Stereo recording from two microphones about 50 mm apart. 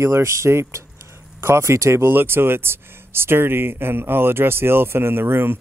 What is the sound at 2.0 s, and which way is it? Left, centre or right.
Speech, right.